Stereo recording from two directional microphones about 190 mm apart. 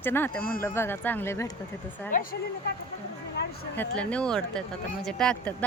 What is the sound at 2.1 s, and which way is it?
Speech, 50° left (ahead or behind).